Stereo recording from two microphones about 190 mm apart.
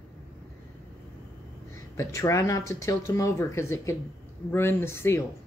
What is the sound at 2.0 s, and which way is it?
A woman's voice, 15° left (ahead or behind).